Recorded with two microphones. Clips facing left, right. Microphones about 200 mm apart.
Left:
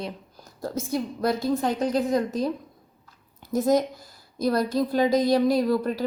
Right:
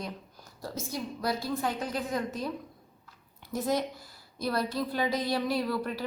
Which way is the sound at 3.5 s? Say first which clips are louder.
Left 8 dB; 45° left (ahead or behind).